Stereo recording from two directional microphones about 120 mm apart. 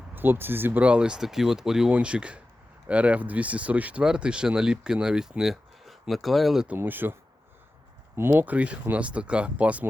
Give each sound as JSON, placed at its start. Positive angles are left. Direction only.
{"t": 0.1, "sound": "speech", "side_deg": -15}
{"t": 6.7, "sound": "speech", "side_deg": -15}